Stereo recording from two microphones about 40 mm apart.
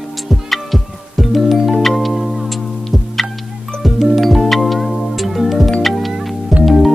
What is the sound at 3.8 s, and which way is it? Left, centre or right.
Music, centre.